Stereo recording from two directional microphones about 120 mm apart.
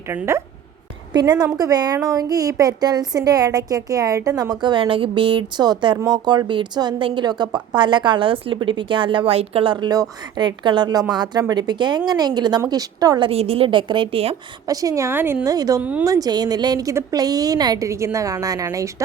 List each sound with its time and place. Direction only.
0.1 s a woman's voice: 20° right (ahead or behind)
1.1 s a woman's voice: 35° right (ahead or behind)
9.9 s a woman's voice: 35° right (ahead or behind)
13.2 s a woman's voice: 55° right (ahead or behind)
14.7 s a woman's voice: 30° right (ahead or behind)
15.4 s a woman's voice: 30° right (ahead or behind)
15.8 s speech: 10° right (ahead or behind)
16.0 s a woman's voice: 30° right (ahead or behind)